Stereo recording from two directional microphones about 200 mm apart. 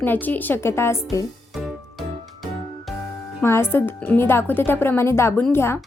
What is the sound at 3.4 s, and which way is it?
A woman's voice, 10° left (ahead or behind).